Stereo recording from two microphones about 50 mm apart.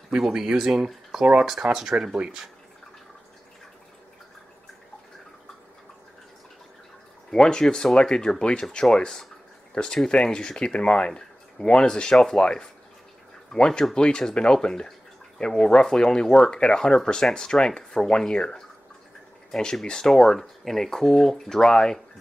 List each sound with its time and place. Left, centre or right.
0.1 s speech: centre
7.2 s speech: centre